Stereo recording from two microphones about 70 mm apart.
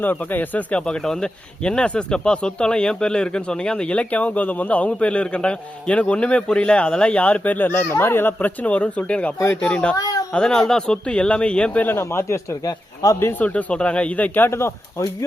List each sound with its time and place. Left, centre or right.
0.0 s speech: left
0.8 s speech: centre
9.9 s a woman's voice: left
10.3 s speech: centre
11.9 s speech: left
12.6 s speech: left
13.4 s speech: left
14.5 s speech: left